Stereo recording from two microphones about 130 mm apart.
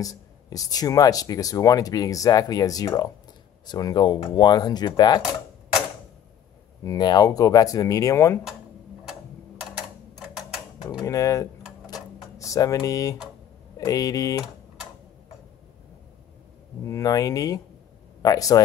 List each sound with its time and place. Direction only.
0.0 s speech: 25° left (ahead or behind)
6.8 s speech: 30° left (ahead or behind)
11.1 s speech: 25° left (ahead or behind)
11.8 s a sound: 25° left (ahead or behind)
13.7 s speech: 25° left (ahead or behind)
16.8 s speech: 25° left (ahead or behind)